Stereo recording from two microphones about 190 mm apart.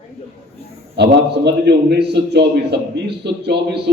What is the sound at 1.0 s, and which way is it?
A man's voice, 60° right (ahead or behind).